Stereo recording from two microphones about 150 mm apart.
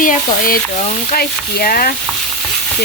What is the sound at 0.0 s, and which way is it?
Stir, 65° left (ahead or behind).